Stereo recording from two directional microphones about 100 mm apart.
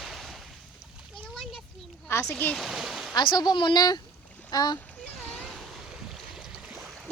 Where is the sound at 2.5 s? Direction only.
5° right (ahead or behind).